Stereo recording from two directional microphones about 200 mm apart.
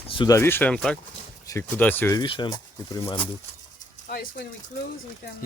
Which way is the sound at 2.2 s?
20° left (ahead or behind).